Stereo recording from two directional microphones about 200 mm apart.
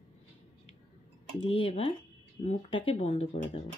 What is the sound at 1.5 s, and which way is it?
Speech, 30° left (ahead or behind).